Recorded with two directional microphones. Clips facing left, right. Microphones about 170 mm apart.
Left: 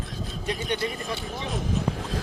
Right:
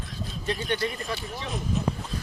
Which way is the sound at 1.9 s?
90° left.